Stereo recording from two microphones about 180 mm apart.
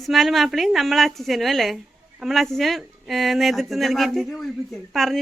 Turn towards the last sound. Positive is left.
turn(degrees=0)  # may be behind; listen again after turning